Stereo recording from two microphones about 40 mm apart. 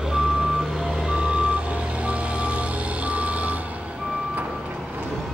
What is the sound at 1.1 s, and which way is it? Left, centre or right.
Reversing beeps, right.